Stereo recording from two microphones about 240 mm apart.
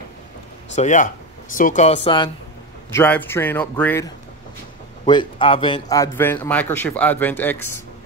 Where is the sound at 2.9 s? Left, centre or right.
Centre.